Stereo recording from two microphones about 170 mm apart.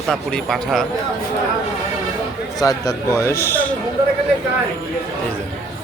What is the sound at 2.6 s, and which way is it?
A man's voice, 20° left (ahead or behind).